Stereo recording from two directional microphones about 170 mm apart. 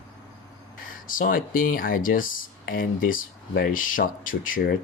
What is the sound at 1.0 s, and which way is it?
Speech, 55° left (ahead or behind).